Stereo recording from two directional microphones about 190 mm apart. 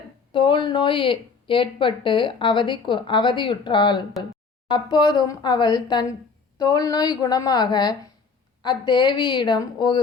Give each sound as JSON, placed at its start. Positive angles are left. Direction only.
{"t": 0.3, "sound": "speech", "side_deg": 25}